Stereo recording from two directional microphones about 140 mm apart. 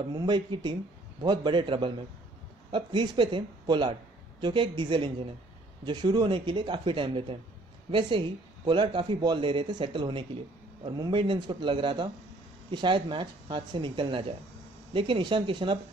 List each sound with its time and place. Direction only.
0.1 s speech: 30° right (ahead or behind)